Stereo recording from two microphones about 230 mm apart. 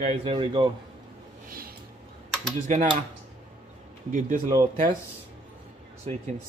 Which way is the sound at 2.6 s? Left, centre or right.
Right.